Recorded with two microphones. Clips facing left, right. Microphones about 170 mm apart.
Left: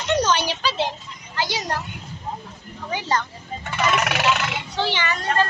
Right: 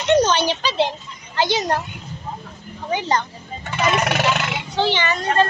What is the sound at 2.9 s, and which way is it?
Speech, 20° right (ahead or behind).